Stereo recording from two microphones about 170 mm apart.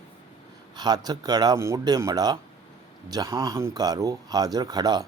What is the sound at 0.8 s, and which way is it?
Speech, 25° right (ahead or behind).